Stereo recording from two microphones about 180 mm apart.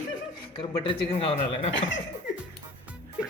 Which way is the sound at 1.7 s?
90° left.